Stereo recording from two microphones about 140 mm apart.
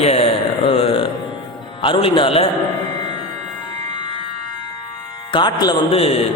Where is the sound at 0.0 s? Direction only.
45° left (ahead or behind).